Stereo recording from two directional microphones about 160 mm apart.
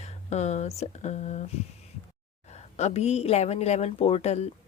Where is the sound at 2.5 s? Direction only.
45° left (ahead or behind).